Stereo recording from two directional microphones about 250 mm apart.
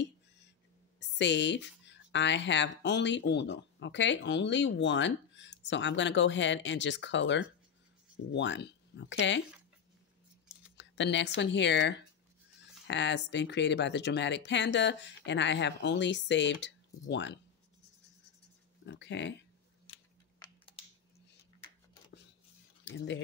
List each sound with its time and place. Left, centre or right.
0.9 s speech: left
10.8 s speech: left
18.9 s pig: left
19.9 s a sound: left
22.8 s speech: left